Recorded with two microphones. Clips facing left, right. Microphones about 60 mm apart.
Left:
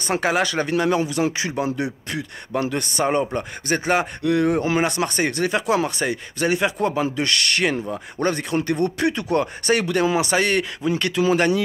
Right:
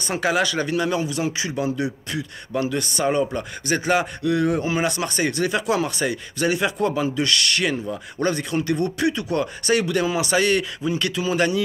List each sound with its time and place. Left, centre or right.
0.0 s a man's voice: left
4.2 s a man's voice: left
7.2 s a man's voice: left